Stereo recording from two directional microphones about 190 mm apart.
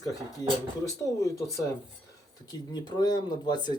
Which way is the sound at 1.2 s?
15° left (ahead or behind).